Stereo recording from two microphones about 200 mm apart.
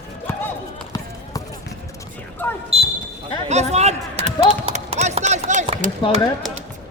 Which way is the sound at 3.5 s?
35° right (ahead or behind).